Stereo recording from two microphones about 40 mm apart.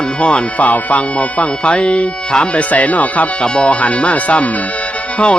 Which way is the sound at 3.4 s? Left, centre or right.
Left.